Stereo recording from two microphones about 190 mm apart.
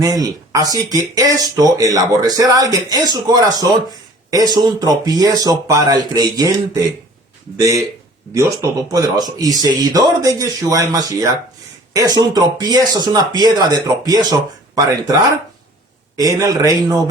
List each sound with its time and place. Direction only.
0.0 s speech: 20° right (ahead or behind)
7.5 s speech: 15° right (ahead or behind)